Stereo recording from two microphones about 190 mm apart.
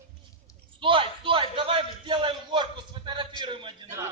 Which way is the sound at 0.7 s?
25° right (ahead or behind).